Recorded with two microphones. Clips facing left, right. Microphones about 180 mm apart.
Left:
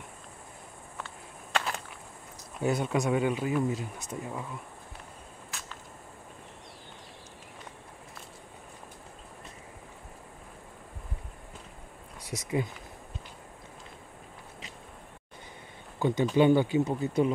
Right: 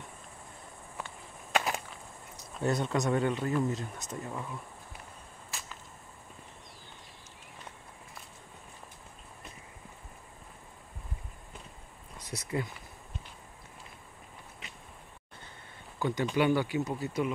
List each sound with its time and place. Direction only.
1.5 s chop: 10° right (ahead or behind)
2.6 s speech: 10° left (ahead or behind)
12.3 s speech: 15° left (ahead or behind)
16.0 s speech: 20° left (ahead or behind)